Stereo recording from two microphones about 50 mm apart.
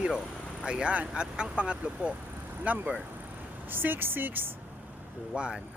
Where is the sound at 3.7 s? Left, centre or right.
Right.